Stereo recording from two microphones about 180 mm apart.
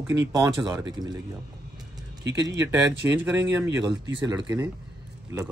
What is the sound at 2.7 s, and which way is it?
Speech, 10° right (ahead or behind).